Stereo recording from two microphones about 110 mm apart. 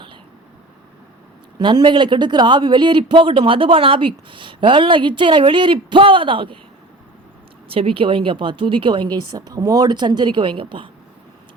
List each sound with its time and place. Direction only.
1.5 s speech: 45° right (ahead or behind)
7.7 s speech: 55° right (ahead or behind)